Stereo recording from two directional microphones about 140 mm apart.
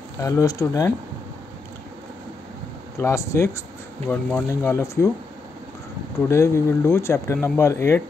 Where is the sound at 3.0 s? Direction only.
20° left (ahead or behind).